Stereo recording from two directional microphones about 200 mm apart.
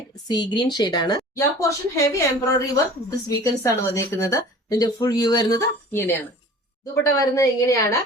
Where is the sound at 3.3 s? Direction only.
15° left (ahead or behind).